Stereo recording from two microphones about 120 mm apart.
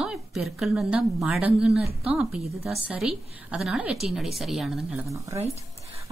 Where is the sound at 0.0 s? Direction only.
5° right (ahead or behind).